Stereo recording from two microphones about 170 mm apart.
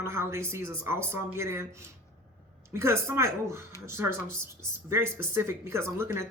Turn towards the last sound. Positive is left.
turn(degrees=-15)  # may be behind; listen again after turning